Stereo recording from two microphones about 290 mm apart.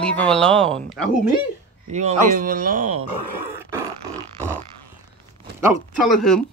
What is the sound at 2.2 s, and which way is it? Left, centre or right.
Speech, right.